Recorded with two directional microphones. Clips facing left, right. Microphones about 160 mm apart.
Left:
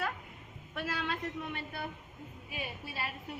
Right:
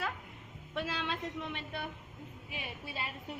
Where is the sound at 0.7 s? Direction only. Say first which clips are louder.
Even; 25° right (ahead or behind).